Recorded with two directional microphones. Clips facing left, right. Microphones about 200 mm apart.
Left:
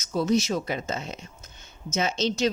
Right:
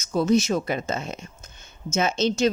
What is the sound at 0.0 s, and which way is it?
Speech, 50° right (ahead or behind).